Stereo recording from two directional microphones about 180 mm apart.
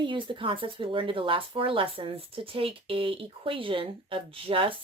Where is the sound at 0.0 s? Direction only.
25° right (ahead or behind).